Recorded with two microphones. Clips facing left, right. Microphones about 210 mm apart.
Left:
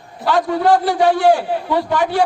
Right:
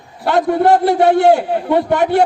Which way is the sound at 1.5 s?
55° right (ahead or behind).